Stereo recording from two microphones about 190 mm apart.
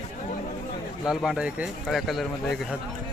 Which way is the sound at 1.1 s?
5° right (ahead or behind).